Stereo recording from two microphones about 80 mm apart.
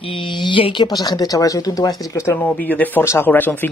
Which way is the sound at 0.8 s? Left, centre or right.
Left.